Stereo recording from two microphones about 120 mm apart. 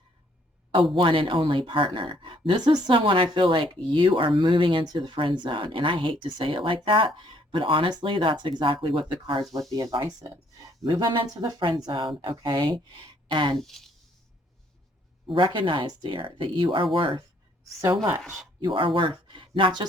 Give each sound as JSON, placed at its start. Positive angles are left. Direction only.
{"t": 0.9, "sound": "speech", "side_deg": -45}
{"t": 3.0, "sound": "speech", "side_deg": -50}
{"t": 9.6, "sound": "a woman's voice", "side_deg": -30}
{"t": 13.6, "sound": "speech", "side_deg": 0}
{"t": 15.5, "sound": "speech", "side_deg": -45}
{"t": 15.9, "sound": "a woman's voice", "side_deg": -35}
{"t": 16.1, "sound": "speech", "side_deg": -45}
{"t": 18.2, "sound": "speech", "side_deg": 0}
{"t": 18.6, "sound": "speech", "side_deg": -45}